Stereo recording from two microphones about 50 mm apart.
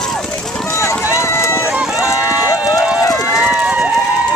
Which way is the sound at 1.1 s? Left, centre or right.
Left.